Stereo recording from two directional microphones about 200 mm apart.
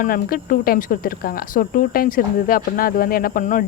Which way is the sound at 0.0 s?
45° left (ahead or behind).